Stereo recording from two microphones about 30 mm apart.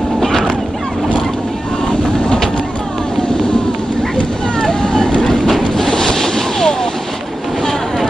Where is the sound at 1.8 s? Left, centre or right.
Centre.